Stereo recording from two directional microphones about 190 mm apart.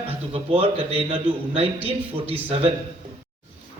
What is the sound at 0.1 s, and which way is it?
A man's voice, 30° right (ahead or behind).